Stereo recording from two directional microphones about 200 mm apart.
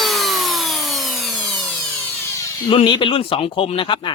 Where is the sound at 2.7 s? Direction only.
25° left (ahead or behind).